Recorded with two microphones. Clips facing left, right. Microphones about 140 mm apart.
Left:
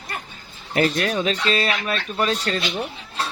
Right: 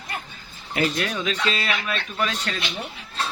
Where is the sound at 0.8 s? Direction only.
35° left (ahead or behind).